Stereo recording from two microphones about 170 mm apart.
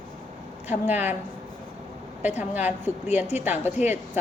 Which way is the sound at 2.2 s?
10° right (ahead or behind).